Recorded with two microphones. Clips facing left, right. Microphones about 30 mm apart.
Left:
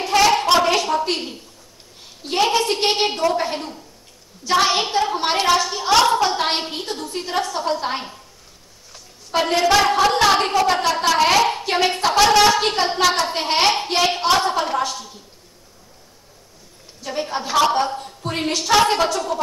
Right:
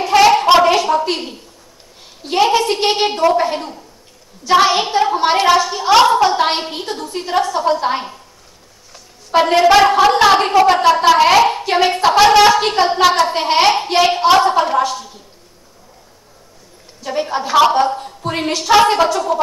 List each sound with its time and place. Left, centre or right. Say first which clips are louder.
0.1 s a sound: right 6 dB; centre
3.3 s a woman's voice: right 6 dB; centre
9.3 s a woman's voice: right 6 dB; centre
17.0 s a woman's voice: right 5 dB; centre